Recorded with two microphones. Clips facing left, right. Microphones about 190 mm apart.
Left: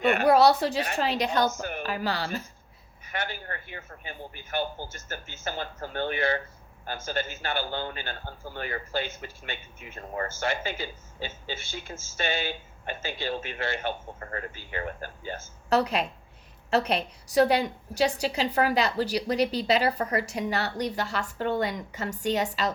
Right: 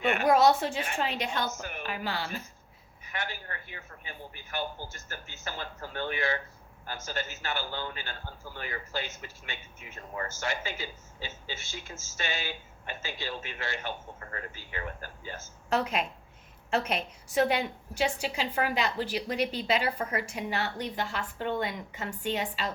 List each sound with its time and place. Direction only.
0.3 s a woman's voice: 35° left (ahead or behind)
4.5 s a man's voice: 25° left (ahead or behind)
7.9 s speech: 60° left (ahead or behind)
10.4 s speech: 30° left (ahead or behind)
13.6 s a man's voice: 55° left (ahead or behind); by 22.7 s 40° left (ahead or behind)